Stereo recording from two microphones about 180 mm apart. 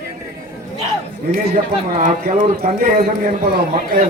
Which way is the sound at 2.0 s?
45° right (ahead or behind).